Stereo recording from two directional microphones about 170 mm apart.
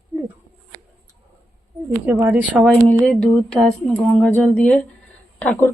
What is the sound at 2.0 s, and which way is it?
Speech, 15° right (ahead or behind).